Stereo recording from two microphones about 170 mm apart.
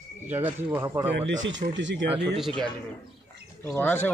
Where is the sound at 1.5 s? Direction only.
90° right.